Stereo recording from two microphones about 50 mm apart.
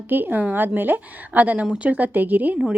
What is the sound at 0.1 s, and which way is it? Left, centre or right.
A woman's voice, right.